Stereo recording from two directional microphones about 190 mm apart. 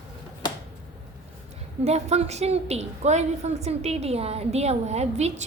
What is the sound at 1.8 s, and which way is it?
A woman's voice, 35° right (ahead or behind).